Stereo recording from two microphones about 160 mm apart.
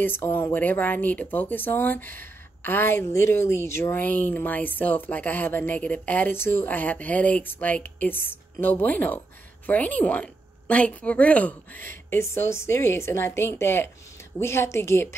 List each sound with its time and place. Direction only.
0.0 s speech: 15° left (ahead or behind)